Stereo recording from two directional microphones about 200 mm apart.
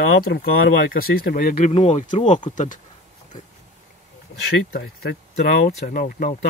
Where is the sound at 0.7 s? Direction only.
45° left (ahead or behind).